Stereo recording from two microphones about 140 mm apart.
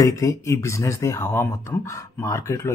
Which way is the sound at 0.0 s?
25° left (ahead or behind).